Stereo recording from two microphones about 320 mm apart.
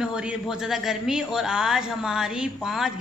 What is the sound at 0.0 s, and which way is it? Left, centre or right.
A man's voice, centre.